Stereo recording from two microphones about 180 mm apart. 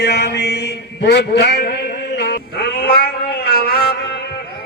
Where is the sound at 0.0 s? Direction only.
65° left (ahead or behind).